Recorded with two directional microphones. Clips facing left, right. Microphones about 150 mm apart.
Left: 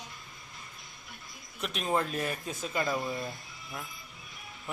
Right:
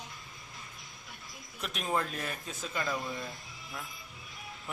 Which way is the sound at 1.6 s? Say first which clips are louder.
Left 3 dB; centre (ahead or behind).